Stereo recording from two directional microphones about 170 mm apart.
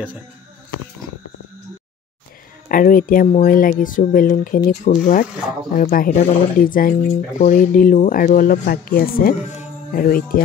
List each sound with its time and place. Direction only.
2.7 s speech: 55° left (ahead or behind)